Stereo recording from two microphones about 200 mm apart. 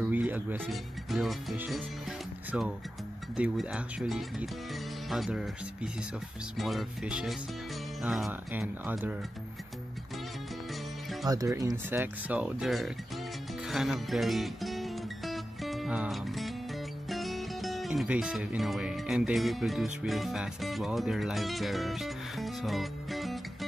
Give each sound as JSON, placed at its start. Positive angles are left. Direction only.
{"t": 0.0, "sound": "speech", "side_deg": -10}
{"t": 11.2, "sound": "speech", "side_deg": -15}
{"t": 13.7, "sound": "music", "side_deg": 0}
{"t": 17.1, "sound": "speech", "side_deg": 0}